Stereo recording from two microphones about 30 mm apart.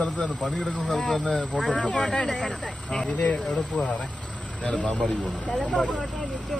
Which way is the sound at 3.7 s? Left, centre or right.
Left.